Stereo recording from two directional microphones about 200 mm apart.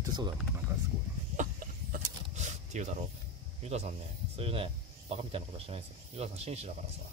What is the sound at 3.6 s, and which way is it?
Speech, 30° right (ahead or behind).